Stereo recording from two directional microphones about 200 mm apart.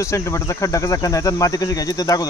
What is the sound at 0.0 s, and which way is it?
Speech, 15° left (ahead or behind).